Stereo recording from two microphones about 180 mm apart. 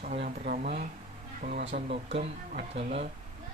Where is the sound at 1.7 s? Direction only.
35° right (ahead or behind).